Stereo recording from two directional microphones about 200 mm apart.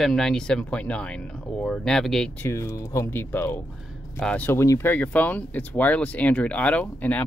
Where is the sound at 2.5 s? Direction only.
15° left (ahead or behind).